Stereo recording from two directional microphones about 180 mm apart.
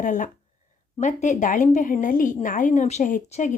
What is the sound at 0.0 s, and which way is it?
Speech, 45° left (ahead or behind).